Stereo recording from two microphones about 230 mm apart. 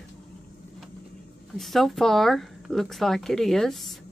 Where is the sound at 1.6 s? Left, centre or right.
Centre.